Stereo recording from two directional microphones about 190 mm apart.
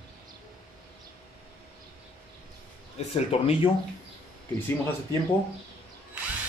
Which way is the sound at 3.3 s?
30° left (ahead or behind).